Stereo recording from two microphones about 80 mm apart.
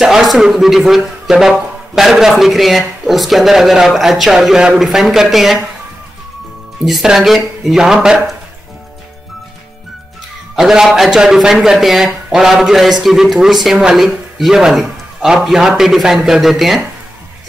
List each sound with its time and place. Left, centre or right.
0.0 s a man's voice: centre
6.8 s a man's voice: centre
10.5 s a man's voice: centre